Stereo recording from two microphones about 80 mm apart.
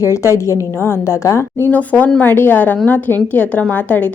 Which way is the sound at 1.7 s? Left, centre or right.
Centre.